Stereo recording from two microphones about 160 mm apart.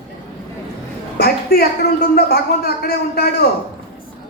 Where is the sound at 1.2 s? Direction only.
80° left.